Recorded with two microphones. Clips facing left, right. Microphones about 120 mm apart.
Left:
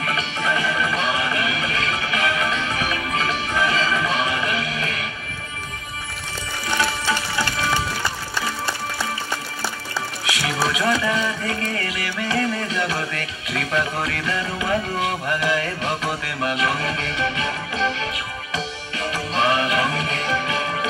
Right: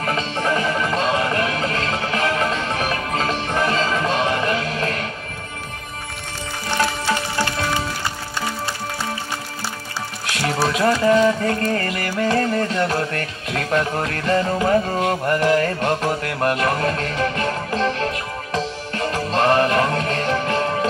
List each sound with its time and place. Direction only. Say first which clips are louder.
0.0 s music: right 3 dB; 40° right (ahead or behind)
10.4 s music: right 4 dB; 45° right (ahead or behind)